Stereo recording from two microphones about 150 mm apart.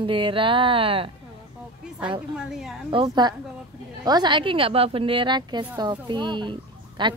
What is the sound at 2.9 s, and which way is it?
A woman's voice, 30° right (ahead or behind).